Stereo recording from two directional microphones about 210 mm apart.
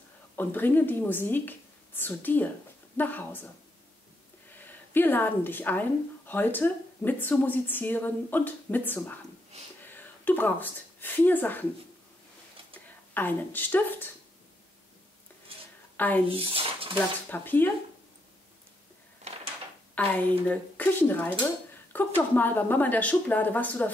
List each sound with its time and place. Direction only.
0.4 s speech: 10° left (ahead or behind)
4.5 s speech: 10° left (ahead or behind)
13.1 s speech: 10° left (ahead or behind)
16.3 s speech: 25° right (ahead or behind)
17.3 s speech: 10° left (ahead or behind)
19.3 s a sound: 30° right (ahead or behind)
20.0 s speech: 5° left (ahead or behind)